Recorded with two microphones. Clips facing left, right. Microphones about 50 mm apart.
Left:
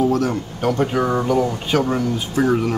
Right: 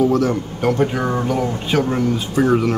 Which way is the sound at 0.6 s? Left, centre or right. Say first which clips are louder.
Even; centre.